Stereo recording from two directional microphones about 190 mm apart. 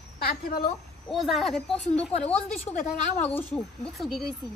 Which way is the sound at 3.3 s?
5° left (ahead or behind).